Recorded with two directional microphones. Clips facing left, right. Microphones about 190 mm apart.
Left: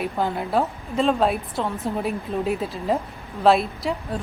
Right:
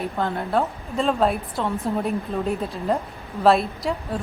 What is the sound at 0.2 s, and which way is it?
A woman's voice, 5° left (ahead or behind).